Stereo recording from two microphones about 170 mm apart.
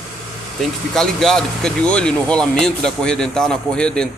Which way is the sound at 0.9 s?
5° left (ahead or behind).